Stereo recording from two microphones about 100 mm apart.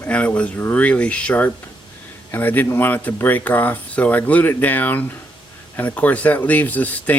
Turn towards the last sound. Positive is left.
turn(degrees=15)  # may be behind; listen again after turning